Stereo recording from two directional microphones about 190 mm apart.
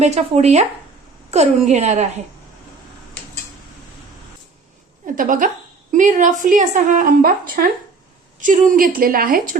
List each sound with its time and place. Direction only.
0.0 s a woman's voice: 35° right (ahead or behind)
5.0 s a woman's voice: 45° right (ahead or behind)